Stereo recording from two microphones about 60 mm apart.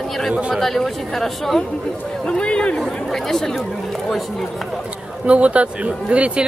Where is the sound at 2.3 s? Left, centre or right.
Centre.